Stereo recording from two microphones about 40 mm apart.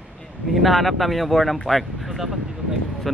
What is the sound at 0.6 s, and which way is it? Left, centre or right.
A man's voice, centre.